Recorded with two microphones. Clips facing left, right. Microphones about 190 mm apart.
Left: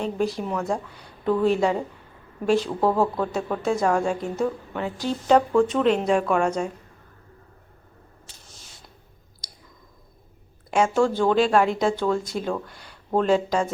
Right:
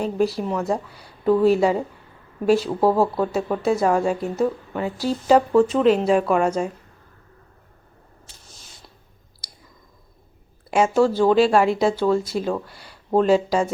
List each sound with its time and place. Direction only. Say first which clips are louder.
0.0 s a woman's voice: right 3 dB; 5° right (ahead or behind)
10.7 s a woman's voice: right 3 dB; 5° right (ahead or behind)